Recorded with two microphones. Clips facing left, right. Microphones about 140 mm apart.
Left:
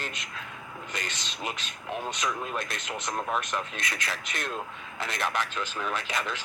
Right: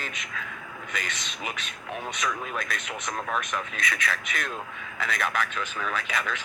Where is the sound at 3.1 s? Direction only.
10° left (ahead or behind).